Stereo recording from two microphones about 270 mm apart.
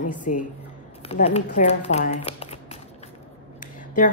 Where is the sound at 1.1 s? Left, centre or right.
Left.